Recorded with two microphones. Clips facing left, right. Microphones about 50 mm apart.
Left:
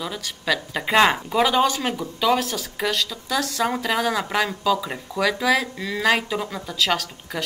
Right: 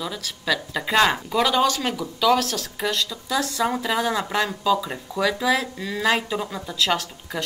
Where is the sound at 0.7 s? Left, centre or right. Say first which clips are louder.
Left 2 dB; centre.